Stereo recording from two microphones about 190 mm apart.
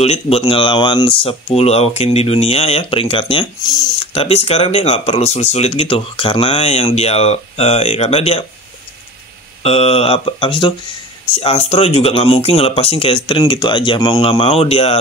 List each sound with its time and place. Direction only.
0.0 s speech: 30° left (ahead or behind)
9.6 s speech: 30° left (ahead or behind)